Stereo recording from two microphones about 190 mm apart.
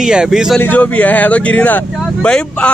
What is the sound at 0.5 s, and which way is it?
Speech, 10° left (ahead or behind).